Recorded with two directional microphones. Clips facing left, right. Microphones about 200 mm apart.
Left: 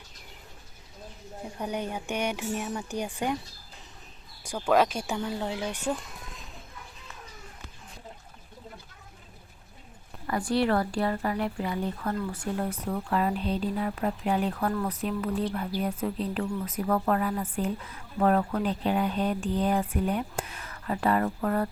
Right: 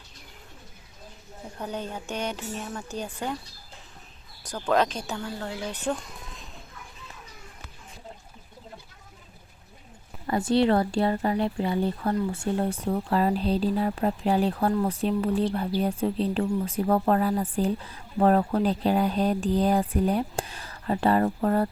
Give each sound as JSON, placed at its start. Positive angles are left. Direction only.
{"t": 1.5, "sound": "speech", "side_deg": 15}
{"t": 4.4, "sound": "speech", "side_deg": 10}
{"t": 10.2, "sound": "speech", "side_deg": -25}